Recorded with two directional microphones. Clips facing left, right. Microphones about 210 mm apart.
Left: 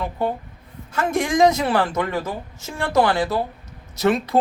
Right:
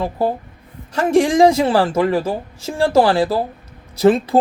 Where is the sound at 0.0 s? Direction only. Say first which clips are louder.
Right 4 dB; 35° right (ahead or behind).